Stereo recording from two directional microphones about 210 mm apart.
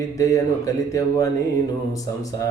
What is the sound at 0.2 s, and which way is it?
Speech, 15° left (ahead or behind).